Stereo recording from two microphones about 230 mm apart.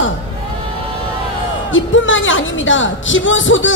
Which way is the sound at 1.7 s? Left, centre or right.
Left.